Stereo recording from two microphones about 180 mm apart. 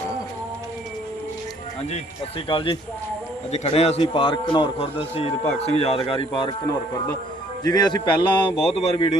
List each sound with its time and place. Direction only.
2.5 s a man's voice: 30° left (ahead or behind)
7.6 s a man's voice: 20° left (ahead or behind)